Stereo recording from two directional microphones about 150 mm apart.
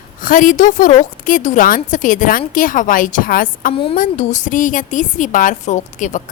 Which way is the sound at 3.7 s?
40° left (ahead or behind).